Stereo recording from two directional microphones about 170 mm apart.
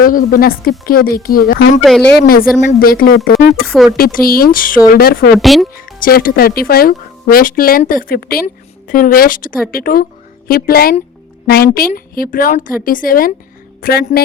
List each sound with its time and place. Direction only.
0.0 s speech: 55° left (ahead or behind); by 1.7 s 75° left (ahead or behind)
1.8 s speech: 5° left (ahead or behind)
2.2 s speech: 60° left (ahead or behind)
3.5 s speech: centre (ahead or behind)
3.9 s speech: 60° left (ahead or behind)
5.3 s speech: centre (ahead or behind)
5.7 s speech: 60° left (ahead or behind)